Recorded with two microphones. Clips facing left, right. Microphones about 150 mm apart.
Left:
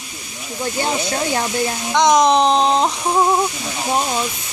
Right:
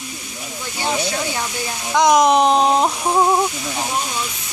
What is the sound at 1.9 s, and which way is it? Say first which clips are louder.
Speech: even; 5° right (ahead or behind).